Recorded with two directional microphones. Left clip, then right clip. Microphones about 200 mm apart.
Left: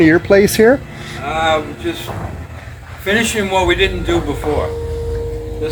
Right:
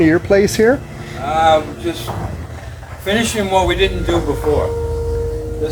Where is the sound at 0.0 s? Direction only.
50° left (ahead or behind).